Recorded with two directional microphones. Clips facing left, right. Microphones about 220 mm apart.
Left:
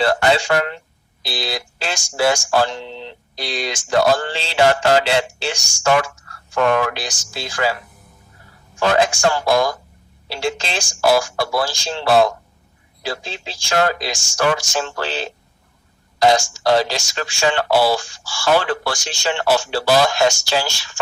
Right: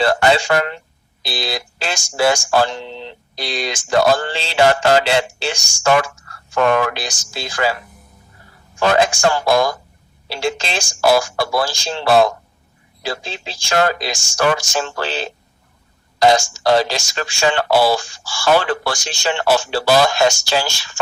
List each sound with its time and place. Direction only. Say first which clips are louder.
0.0 s speech: right 1 dB; 90° right
1.2 s mantra: right 1 dB; 80° right
6.7 s speech: right 1 dB; 90° right
8.8 s speech: right 1 dB; 90° right
10.2 s mantra: right 1 dB; 80° right
13.7 s mantra: right 1 dB; 85° right
16.2 s speech: right 1 dB; 90° right
18.5 s mantra: right 1 dB; 90° right